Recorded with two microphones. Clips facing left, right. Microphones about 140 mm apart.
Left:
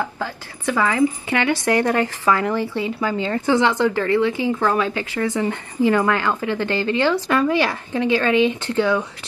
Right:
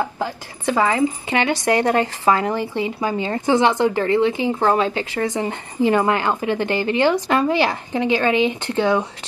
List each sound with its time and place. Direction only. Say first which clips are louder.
0.7 s a woman's voice: even; 30° right (ahead or behind)